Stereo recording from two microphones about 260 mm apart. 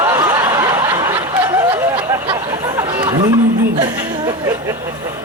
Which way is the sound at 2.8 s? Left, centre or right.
Centre.